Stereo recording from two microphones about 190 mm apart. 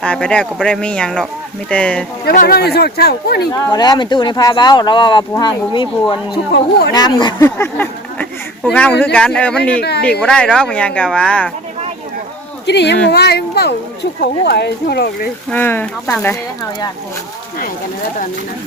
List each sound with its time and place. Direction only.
0.0 s speech: 5° left (ahead or behind)
2.2 s speech: 50° left (ahead or behind)
3.5 s speech: 20° left (ahead or behind)
6.3 s speech: 60° left (ahead or behind)
6.9 s speech: 20° left (ahead or behind)
7.4 s speech: 10° left (ahead or behind)
12.6 s speech: 65° left (ahead or behind)
15.4 s speech: 10° left (ahead or behind)